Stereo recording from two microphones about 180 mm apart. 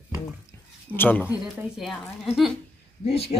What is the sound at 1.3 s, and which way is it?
Speech, 5° right (ahead or behind).